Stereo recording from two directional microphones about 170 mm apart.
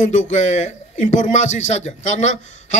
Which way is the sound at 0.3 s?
45° left (ahead or behind).